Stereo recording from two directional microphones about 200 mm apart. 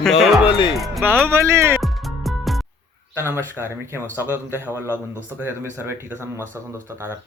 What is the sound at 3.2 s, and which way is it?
Speech, 10° right (ahead or behind).